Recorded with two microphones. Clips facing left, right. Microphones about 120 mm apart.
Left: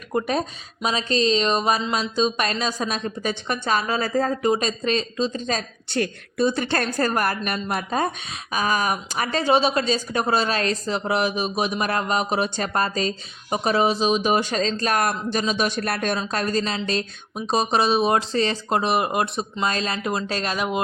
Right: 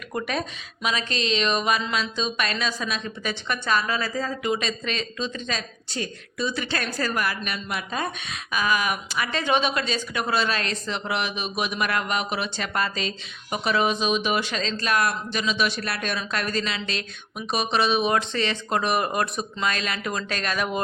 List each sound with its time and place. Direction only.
0.1 s speech: 35° left (ahead or behind)
4.0 s a woman's voice: 50° left (ahead or behind)
4.4 s speech: 35° left (ahead or behind)
5.9 s a woman's voice: 60° left (ahead or behind)
16.2 s speech: 35° left (ahead or behind)